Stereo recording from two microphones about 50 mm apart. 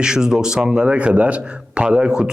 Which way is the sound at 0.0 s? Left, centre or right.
Centre.